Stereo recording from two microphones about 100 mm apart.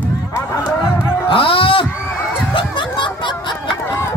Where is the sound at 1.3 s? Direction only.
65° left (ahead or behind).